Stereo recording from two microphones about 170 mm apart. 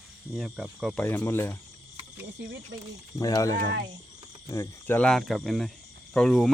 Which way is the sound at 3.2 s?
20° left (ahead or behind).